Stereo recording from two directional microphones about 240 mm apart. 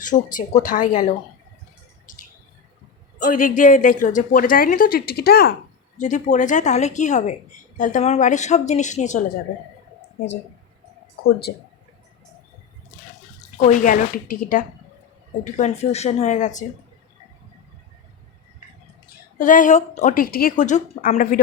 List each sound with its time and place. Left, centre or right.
0.0 s a woman's voice: left
2.1 s a sound: left
3.2 s a woman's voice: left
6.0 s speech: left
11.2 s a woman's voice: left
13.7 s a woman's voice: left
19.4 s a woman's voice: left